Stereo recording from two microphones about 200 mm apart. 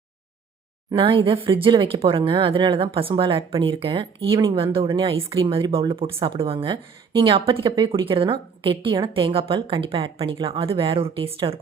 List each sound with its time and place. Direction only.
0.9 s speech: 25° right (ahead or behind)